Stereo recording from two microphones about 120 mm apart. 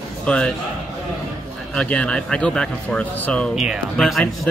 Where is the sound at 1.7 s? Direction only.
10° left (ahead or behind).